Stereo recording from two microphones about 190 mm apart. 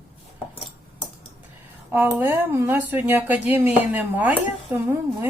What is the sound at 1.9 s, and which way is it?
Speech, 10° right (ahead or behind).